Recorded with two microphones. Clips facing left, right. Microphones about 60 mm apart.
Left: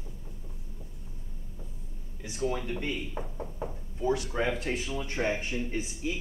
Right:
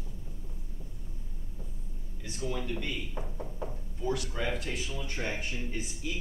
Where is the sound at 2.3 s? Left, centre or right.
Left.